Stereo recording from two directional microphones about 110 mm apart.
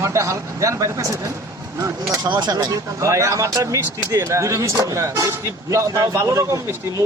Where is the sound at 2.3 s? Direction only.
40° right (ahead or behind).